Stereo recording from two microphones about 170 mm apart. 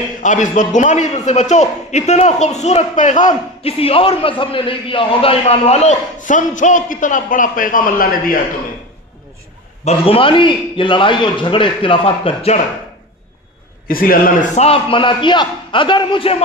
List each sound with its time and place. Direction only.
0.2 s a man's voice: 45° left (ahead or behind)
9.8 s a man's voice: 35° left (ahead or behind)
13.8 s a man's voice: 55° left (ahead or behind); by 16.4 s 35° left (ahead or behind)